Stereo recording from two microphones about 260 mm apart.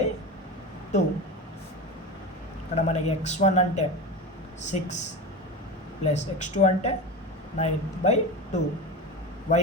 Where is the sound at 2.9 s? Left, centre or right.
Left.